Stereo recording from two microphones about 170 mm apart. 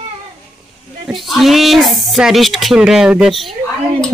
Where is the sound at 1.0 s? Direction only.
Centre (ahead or behind).